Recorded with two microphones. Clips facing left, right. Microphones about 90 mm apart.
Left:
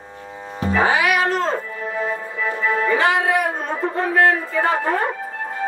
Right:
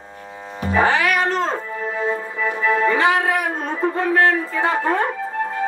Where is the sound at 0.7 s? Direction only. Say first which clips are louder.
Even; 10° left (ahead or behind).